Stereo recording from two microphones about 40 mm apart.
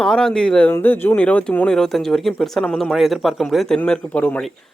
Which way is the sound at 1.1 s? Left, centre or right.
Left.